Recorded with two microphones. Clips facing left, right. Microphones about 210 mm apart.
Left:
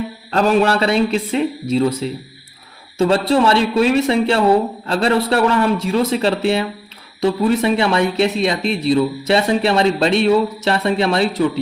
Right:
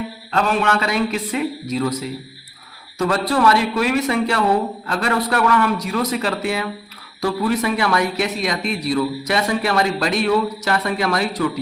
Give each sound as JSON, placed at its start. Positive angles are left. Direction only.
{"t": 0.3, "sound": "speech", "side_deg": 35}